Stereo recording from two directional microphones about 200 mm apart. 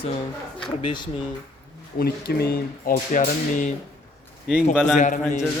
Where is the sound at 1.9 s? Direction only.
50° left (ahead or behind).